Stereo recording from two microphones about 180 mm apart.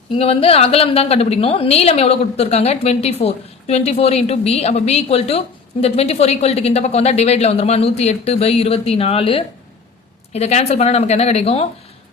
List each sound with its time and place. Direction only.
0.2 s a woman's voice: 30° left (ahead or behind)